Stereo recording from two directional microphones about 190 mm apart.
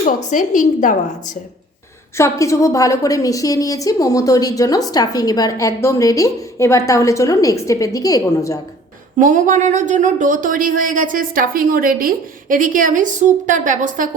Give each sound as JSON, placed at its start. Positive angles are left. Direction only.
{"t": 0.3, "sound": "a woman's voice", "side_deg": 40}
{"t": 2.1, "sound": "a woman's voice", "side_deg": 15}
{"t": 9.1, "sound": "speech", "side_deg": -40}